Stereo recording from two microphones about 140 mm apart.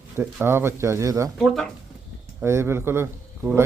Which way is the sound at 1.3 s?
Centre (ahead or behind).